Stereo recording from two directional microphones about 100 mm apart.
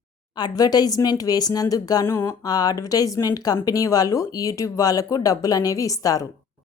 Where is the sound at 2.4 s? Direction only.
40° left (ahead or behind).